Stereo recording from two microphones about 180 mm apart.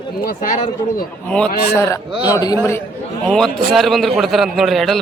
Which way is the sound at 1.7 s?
15° left (ahead or behind).